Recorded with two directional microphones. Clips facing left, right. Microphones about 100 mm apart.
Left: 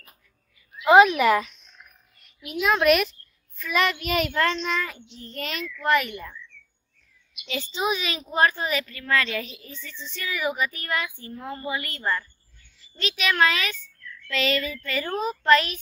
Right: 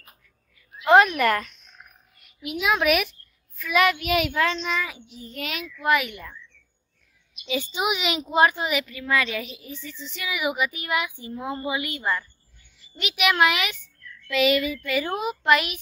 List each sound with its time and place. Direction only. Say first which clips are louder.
0.8 s a sound: left 2 dB; centre (ahead or behind)
2.6 s a child's voice: left 2 dB; 5° right (ahead or behind)
7.4 s a woman's voice: right 1 dB; 15° right (ahead or behind)